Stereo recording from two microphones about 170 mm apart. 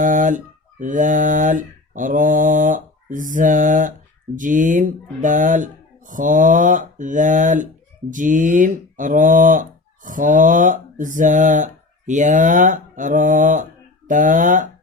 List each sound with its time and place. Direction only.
0.0 s speech: 50° right (ahead or behind)